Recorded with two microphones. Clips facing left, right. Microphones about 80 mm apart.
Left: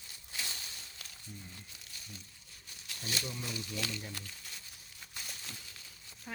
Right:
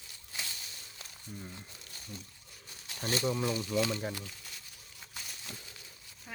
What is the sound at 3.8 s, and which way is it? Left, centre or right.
Speech, right.